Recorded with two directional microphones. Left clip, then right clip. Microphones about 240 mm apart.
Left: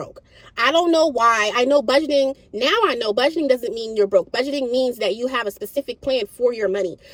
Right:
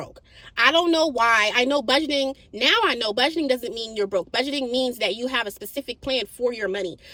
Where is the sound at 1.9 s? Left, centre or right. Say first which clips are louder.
Left 4 dB; centre.